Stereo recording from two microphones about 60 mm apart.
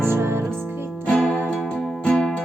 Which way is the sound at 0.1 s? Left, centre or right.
Right.